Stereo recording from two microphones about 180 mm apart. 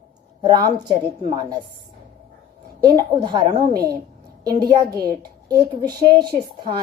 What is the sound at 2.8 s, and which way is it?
Speech, 25° right (ahead or behind).